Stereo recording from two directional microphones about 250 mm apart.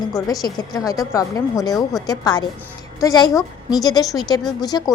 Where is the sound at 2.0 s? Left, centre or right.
Centre.